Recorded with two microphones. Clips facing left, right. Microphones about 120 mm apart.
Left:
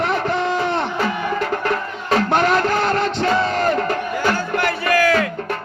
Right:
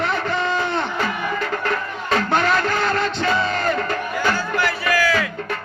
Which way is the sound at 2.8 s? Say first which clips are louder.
Left 2 dB; 55° left (ahead or behind).